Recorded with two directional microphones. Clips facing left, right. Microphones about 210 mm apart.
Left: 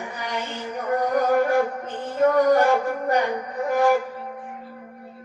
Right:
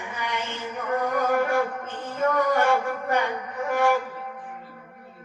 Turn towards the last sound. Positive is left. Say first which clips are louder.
# left 3 dB
turn(degrees=35)  # may be behind; listen again after turning